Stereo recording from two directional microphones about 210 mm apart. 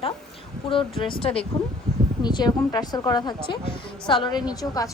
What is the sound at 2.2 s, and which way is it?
A woman's voice, 20° left (ahead or behind).